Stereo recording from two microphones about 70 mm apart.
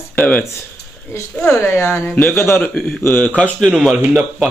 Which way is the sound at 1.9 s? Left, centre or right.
Left.